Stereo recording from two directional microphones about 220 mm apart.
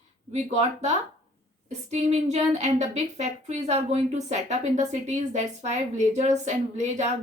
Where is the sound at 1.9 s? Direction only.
30° right (ahead or behind).